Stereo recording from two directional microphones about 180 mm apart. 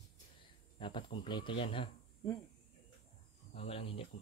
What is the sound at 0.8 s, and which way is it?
Speech, 30° left (ahead or behind).